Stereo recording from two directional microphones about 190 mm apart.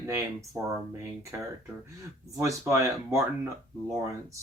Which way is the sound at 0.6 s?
10° right (ahead or behind).